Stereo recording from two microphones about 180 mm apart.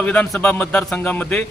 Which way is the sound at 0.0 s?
10° left (ahead or behind).